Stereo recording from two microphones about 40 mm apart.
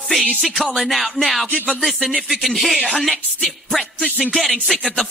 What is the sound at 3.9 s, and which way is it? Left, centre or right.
Music, centre.